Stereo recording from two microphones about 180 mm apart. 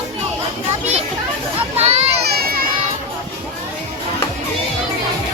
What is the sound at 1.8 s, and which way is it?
Children playing, 35° right (ahead or behind).